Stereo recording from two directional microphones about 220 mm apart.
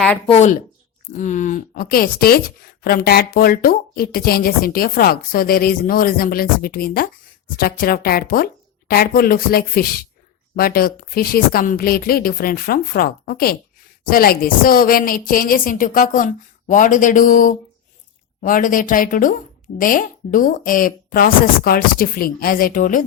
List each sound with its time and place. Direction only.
0.3 s a woman's voice: 30° left (ahead or behind)